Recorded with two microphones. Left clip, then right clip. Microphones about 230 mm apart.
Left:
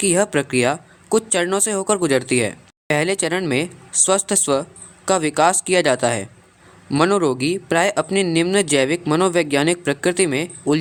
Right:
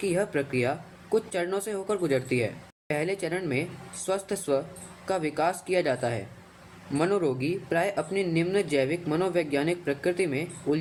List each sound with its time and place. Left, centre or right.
0.0 s speech: left